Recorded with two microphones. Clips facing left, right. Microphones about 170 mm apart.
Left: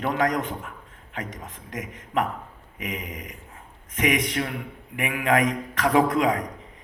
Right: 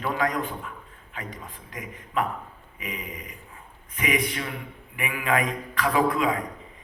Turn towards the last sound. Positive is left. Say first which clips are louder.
# left 3 dB
turn(degrees=75)  # may be behind; listen again after turning